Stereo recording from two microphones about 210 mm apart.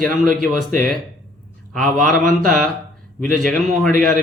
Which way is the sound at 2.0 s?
Centre (ahead or behind).